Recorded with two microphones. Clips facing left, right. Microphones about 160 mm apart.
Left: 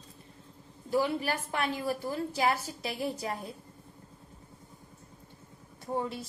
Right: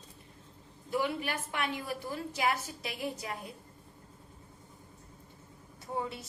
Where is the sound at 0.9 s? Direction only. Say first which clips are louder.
Left 4 dB; 35° left (ahead or behind).